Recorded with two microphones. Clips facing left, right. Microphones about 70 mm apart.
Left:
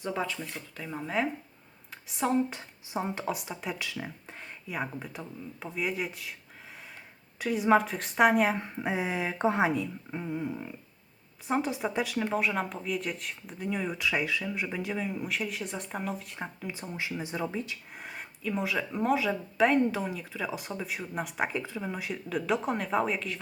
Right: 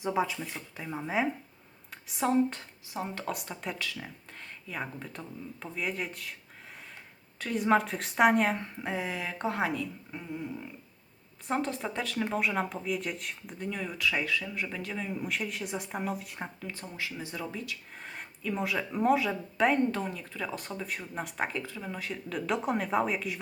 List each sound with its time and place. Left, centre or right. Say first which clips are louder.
0.0 s speech: right 3 dB; centre
2.6 s a woman's voice: left 3 dB; centre
3.2 s speech: left 2 dB; centre
3.8 s speech: left 1 dB; centre
7.3 s speech: left 2 dB; centre
8.5 s a woman's voice: left 3 dB; centre
11.4 s speech: left 2 dB; centre
13.7 s speech: left 2 dB; centre
15.0 s speech: left 1 dB; centre
16.6 s a woman's voice: left 2 dB; centre
17.9 s speech: left 1 dB; centre